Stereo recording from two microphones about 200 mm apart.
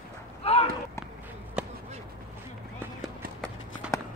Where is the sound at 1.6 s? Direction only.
5° right (ahead or behind).